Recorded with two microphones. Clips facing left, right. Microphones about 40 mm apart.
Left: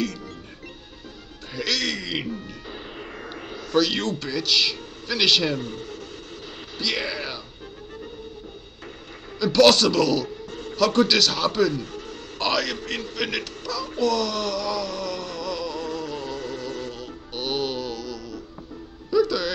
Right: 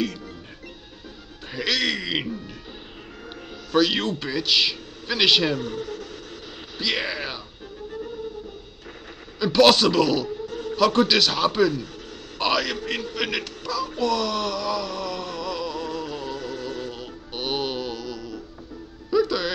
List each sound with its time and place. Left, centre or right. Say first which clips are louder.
1.5 s a man's voice: right 2 dB; centre
5.6 s speech: right 3 dB; right
6.8 s speech: right 1 dB; centre
9.4 s speech: even; centre
10.5 s a sound: right 4 dB; left
10.8 s speech: even; centre
11.8 s a sound: left 2 dB; left
12.4 s a man's voice: right 1 dB; centre
13.9 s a sound: left 2 dB; centre
16.0 s music: even; right
16.3 s music: even; left
16.9 s music: even; centre